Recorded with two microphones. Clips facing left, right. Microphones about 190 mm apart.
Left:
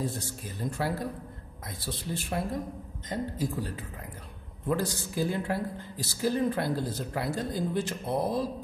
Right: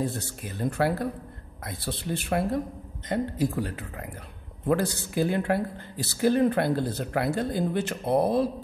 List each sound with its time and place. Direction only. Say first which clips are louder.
0.0 s speech: right 3 dB; 65° right (ahead or behind)